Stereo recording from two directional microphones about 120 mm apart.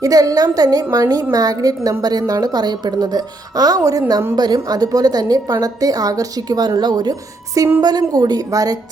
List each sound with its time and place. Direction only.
0.0 s a woman's voice: 30° right (ahead or behind)